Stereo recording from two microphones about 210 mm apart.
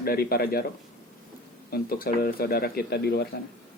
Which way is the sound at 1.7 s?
45° left (ahead or behind).